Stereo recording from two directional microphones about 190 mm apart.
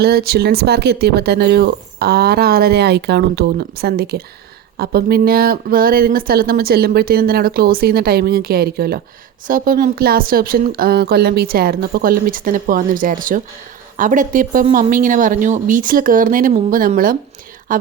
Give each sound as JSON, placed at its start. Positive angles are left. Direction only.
{"t": 0.0, "sound": "speech", "side_deg": -55}